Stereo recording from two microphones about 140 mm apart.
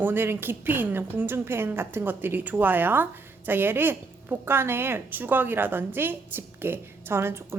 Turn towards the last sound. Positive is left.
turn(degrees=-15)  # may be behind; listen again after turning